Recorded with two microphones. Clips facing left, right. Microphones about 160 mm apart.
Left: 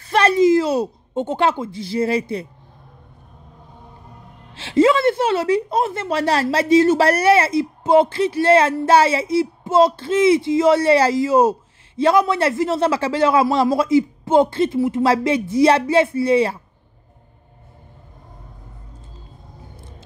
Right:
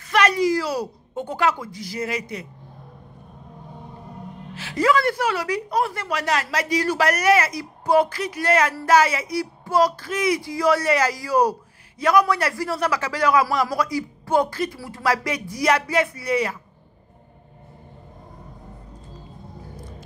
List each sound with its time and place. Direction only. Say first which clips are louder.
0.1 s a woman's voice: left 5 dB; 30° left (ahead or behind)
4.6 s speech: left 5 dB; 25° left (ahead or behind)